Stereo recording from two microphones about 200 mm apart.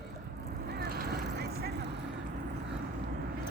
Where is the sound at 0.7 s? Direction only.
50° right (ahead or behind).